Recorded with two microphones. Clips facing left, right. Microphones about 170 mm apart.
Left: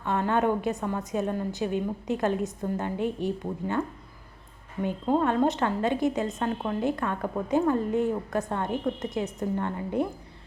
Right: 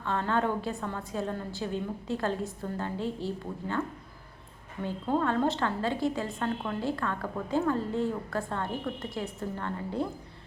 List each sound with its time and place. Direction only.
0.0 s a woman's voice: 15° left (ahead or behind)